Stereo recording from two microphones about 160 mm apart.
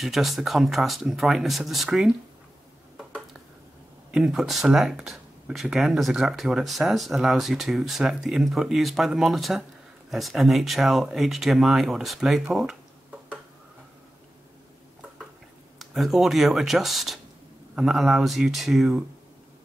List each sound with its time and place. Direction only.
0.0 s speech: centre (ahead or behind)
4.1 s speech: centre (ahead or behind)
15.8 s speech: centre (ahead or behind)